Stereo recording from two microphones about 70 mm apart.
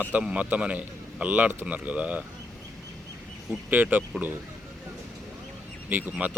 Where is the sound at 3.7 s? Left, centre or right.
Right.